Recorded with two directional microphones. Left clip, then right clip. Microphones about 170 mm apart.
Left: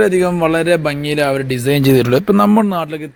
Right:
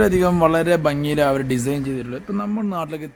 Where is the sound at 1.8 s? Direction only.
65° left (ahead or behind).